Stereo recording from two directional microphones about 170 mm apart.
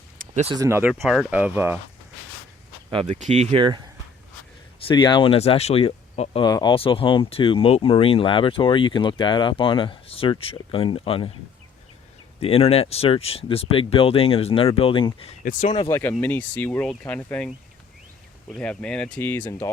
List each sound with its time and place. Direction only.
0.5 s speech: 15° right (ahead or behind)
1.0 s speech: centre (ahead or behind)
3.2 s speech: 40° right (ahead or behind)
4.9 s speech: 25° left (ahead or behind)
6.4 s speech: 25° left (ahead or behind)
12.4 s speech: 35° left (ahead or behind)
15.9 s speech: 15° left (ahead or behind)
18.5 s speech: 5° left (ahead or behind)